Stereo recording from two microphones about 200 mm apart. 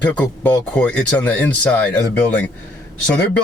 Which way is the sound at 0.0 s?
5° left (ahead or behind).